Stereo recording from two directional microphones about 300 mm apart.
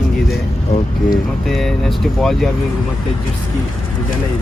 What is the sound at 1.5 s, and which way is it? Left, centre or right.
Speech, centre.